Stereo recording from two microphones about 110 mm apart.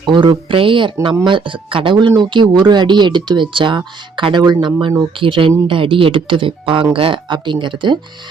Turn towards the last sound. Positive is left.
turn(degrees=-45)  # may be behind; listen again after turning